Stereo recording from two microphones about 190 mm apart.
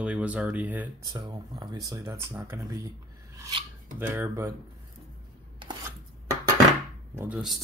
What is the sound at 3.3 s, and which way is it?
Filing, 15° right (ahead or behind).